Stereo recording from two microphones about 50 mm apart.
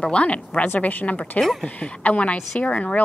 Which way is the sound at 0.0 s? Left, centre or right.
Left.